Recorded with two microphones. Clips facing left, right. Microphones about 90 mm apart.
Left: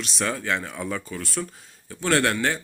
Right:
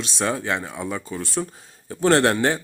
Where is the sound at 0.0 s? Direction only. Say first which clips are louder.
Right 3 dB; 20° right (ahead or behind).